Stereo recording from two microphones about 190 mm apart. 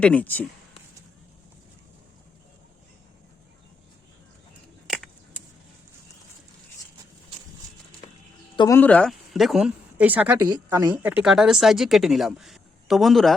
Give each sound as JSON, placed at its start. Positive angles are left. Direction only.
{"t": 0.0, "sound": "speech", "side_deg": 5}
{"t": 8.5, "sound": "speech", "side_deg": 20}
{"t": 8.8, "sound": "speech", "side_deg": 5}